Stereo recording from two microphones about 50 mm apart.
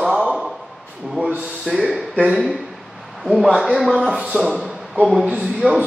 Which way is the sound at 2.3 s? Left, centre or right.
Centre.